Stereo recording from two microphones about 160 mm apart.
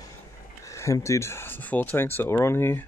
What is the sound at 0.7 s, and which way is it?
Speech, 20° left (ahead or behind).